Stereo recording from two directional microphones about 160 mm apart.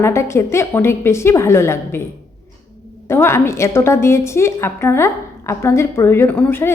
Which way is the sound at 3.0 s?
15° left (ahead or behind).